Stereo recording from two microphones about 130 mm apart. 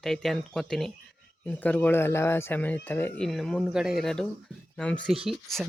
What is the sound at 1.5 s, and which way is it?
Speech, 10° left (ahead or behind).